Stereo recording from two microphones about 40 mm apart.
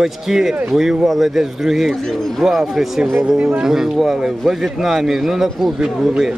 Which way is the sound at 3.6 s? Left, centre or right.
Centre.